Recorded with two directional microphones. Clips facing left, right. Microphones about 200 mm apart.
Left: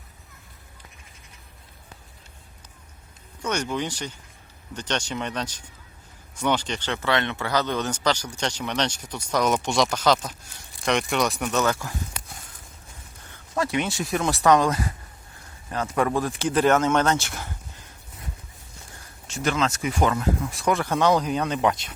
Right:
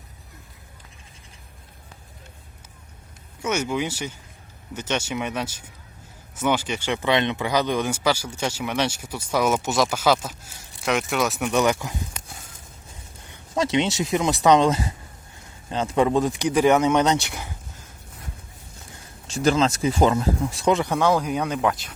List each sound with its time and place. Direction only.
3.4 s speech: 10° right (ahead or behind)
13.3 s speech: 20° right (ahead or behind)
19.3 s speech: 30° right (ahead or behind); by 21.8 s centre (ahead or behind)